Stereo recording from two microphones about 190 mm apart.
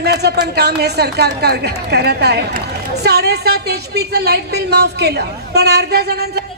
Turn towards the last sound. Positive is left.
turn(degrees=-60)  # may be behind; listen again after turning